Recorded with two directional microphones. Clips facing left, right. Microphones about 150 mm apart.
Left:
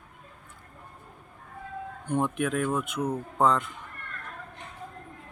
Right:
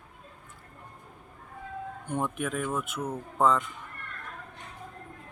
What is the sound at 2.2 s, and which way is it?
Speech, 5° right (ahead or behind).